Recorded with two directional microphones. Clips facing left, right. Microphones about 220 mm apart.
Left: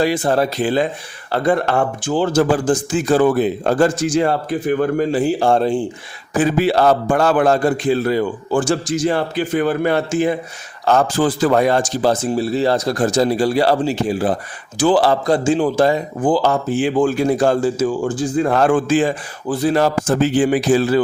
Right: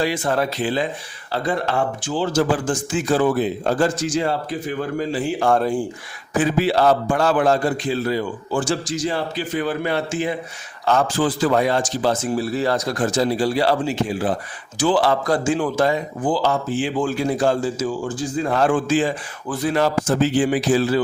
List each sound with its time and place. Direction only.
0.0 s a man's voice: 35° left (ahead or behind); by 2.6 s 50° left (ahead or behind)
2.6 s speech: 40° left (ahead or behind)
3.2 s speech: 55° left (ahead or behind)
5.3 s a man's voice: 30° left (ahead or behind)
6.4 s a man's voice: 50° left (ahead or behind)
12.2 s a man's voice: 25° left (ahead or behind); by 15.0 s 50° left (ahead or behind)
15.0 s a man's voice: 30° left (ahead or behind)
16.2 s a man's voice: 50° left (ahead or behind)
19.5 s a man's voice: 35° left (ahead or behind); by 21.0 s 50° left (ahead or behind)